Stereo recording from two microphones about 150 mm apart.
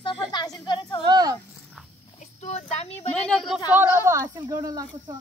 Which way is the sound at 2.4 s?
45° left (ahead or behind).